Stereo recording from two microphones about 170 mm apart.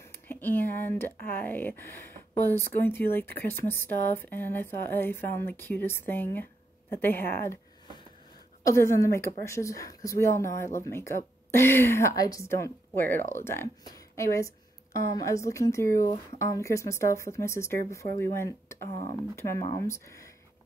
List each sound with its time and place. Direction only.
0.0 s speech: 15° left (ahead or behind)
8.6 s speech: 20° left (ahead or behind)